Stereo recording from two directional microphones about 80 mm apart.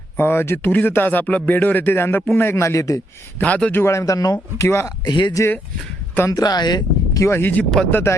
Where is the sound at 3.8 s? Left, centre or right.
Left.